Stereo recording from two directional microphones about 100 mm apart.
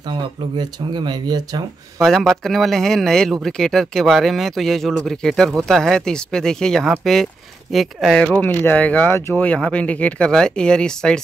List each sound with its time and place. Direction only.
0.6 s speech: 45° right (ahead or behind)
2.0 s speech: 5° left (ahead or behind)
8.2 s speech: 10° left (ahead or behind)